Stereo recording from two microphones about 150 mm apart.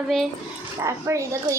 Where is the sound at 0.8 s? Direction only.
20° right (ahead or behind).